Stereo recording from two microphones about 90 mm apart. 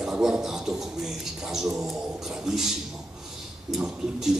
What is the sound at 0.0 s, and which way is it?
A man's voice, 5° right (ahead or behind).